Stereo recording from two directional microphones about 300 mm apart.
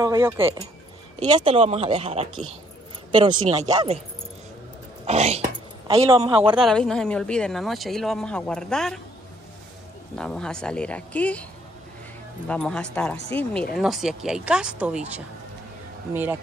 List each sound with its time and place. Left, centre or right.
0.0 s speech: centre
5.0 s speech: right
6.5 s speech: centre
10.1 s speech: centre
12.4 s speech: centre